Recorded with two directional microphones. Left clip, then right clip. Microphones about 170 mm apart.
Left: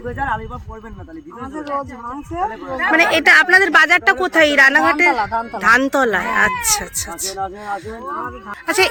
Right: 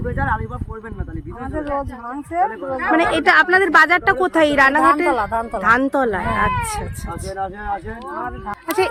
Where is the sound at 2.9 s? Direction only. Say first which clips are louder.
Left 3 dB; 20° right (ahead or behind); by 6.5 s 5° right (ahead or behind).